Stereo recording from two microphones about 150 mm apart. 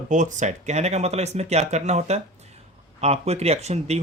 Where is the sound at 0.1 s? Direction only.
55° right (ahead or behind).